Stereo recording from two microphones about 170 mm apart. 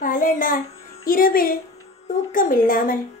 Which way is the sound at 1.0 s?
55° left (ahead or behind).